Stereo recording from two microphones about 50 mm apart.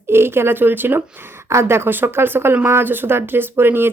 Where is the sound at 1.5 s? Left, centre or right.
Right.